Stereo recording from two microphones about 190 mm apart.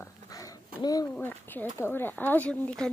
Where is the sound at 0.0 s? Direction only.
20° left (ahead or behind).